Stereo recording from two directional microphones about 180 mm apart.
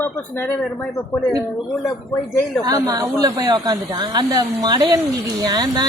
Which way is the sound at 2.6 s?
20° right (ahead or behind).